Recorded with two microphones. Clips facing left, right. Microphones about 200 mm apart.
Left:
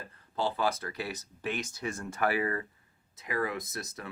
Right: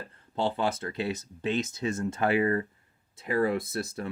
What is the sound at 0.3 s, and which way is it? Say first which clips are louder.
Speech: right 2 dB; 25° right (ahead or behind).